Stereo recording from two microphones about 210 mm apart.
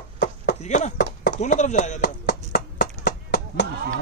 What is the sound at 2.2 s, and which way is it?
Clip-clop, 45° left (ahead or behind).